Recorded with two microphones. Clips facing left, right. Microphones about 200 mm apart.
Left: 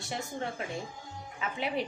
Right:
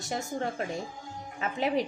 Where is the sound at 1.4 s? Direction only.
40° right (ahead or behind).